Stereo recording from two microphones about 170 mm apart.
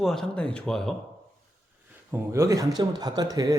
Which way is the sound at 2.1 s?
15° right (ahead or behind).